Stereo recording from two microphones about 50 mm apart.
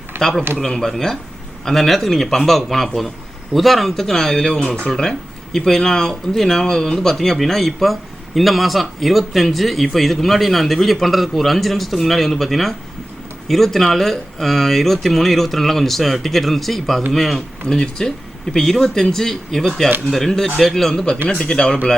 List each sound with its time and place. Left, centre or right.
0.2 s speech: centre